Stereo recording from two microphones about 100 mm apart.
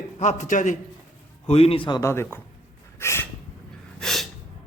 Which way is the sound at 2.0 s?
25° left (ahead or behind).